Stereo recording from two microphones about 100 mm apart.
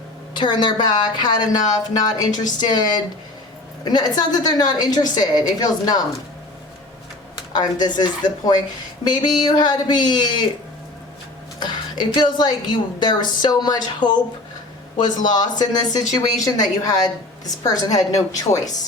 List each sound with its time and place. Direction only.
0.3 s a woman's voice: 50° left (ahead or behind)
7.5 s a woman's voice: 45° left (ahead or behind)
11.6 s a woman's voice: 50° left (ahead or behind)